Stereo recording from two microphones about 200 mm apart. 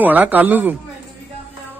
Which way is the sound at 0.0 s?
10° right (ahead or behind).